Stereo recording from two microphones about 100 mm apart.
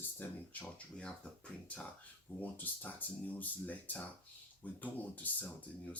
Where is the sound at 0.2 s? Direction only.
15° left (ahead or behind).